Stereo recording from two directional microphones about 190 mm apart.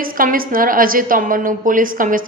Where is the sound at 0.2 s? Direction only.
45° right (ahead or behind).